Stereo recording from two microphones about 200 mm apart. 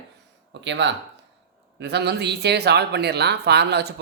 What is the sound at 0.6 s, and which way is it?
Speech, 65° right (ahead or behind).